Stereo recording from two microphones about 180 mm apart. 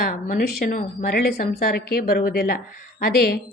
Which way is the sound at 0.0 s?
50° left (ahead or behind).